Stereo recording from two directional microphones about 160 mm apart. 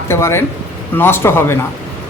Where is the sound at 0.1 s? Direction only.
15° left (ahead or behind).